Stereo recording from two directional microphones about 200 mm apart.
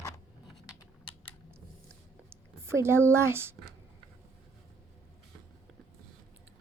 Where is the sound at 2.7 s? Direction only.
10° right (ahead or behind).